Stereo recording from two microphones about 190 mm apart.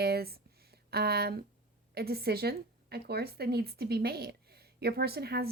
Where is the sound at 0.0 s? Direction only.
55° right (ahead or behind).